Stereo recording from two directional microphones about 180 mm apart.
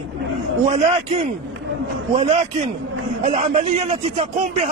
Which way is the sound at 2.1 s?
35° right (ahead or behind).